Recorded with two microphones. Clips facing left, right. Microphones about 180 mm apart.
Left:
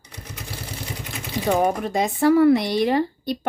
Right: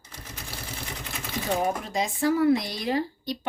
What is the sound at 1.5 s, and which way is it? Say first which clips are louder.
Speech: left 6 dB; 60° left (ahead or behind).